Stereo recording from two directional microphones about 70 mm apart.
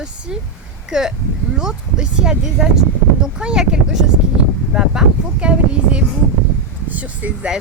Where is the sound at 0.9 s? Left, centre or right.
Centre.